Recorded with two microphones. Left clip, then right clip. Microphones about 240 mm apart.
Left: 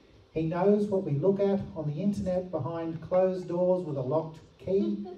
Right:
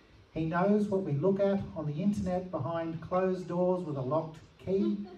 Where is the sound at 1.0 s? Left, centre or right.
Centre.